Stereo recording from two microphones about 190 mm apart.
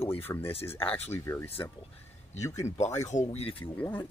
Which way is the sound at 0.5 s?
30° left (ahead or behind).